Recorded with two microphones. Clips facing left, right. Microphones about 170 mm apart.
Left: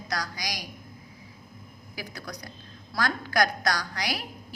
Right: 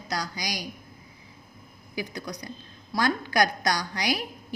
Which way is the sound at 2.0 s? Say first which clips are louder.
Right 5 dB; 20° right (ahead or behind).